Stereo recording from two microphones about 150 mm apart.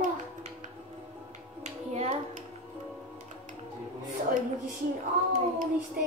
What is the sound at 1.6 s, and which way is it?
Speech, 45° right (ahead or behind).